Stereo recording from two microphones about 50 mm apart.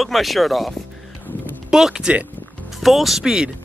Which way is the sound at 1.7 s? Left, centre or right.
Centre.